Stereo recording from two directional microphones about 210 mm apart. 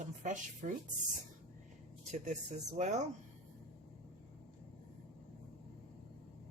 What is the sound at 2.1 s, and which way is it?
Speech, 35° right (ahead or behind).